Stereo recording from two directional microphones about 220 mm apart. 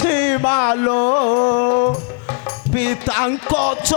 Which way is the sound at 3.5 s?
30° left (ahead or behind).